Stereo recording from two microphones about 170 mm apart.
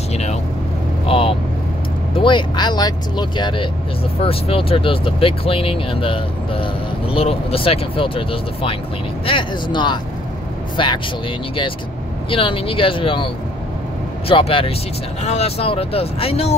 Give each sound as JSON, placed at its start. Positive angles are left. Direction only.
{"t": 1.0, "sound": "vehicle", "side_deg": 35}
{"t": 2.1, "sound": "speech", "side_deg": 30}
{"t": 12.3, "sound": "speech", "side_deg": 30}